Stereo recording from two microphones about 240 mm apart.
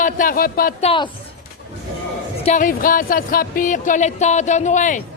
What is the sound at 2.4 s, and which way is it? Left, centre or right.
A man's voice, left.